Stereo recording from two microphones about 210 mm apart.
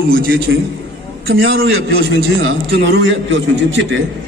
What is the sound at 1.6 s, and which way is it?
A man's voice, 70° right (ahead or behind).